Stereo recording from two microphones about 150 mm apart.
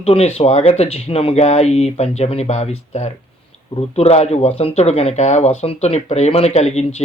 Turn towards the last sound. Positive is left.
turn(degrees=45)  # may be behind; listen again after turning